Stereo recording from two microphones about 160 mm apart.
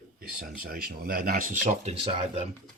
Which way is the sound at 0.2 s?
60° right (ahead or behind).